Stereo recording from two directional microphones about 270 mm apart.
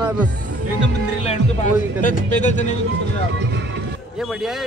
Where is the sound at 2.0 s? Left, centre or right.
Left.